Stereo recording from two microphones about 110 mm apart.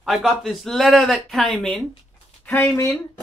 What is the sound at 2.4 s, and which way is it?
Speech, 20° left (ahead or behind).